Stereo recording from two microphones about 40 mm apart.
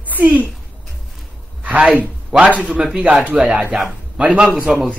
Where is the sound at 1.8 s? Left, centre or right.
Right.